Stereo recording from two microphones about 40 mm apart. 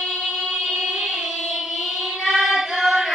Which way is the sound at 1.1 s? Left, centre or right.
Centre.